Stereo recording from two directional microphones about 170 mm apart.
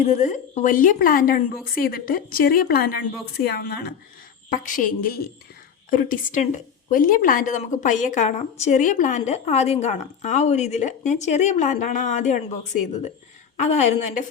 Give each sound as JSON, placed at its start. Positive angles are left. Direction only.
{"t": 0.0, "sound": "a woman's voice", "side_deg": 45}
{"t": 4.4, "sound": "a woman's voice", "side_deg": 50}
{"t": 13.6, "sound": "a woman's voice", "side_deg": 40}